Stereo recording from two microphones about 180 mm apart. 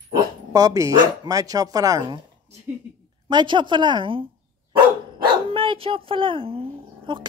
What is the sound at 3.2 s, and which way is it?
Speech, 25° right (ahead or behind).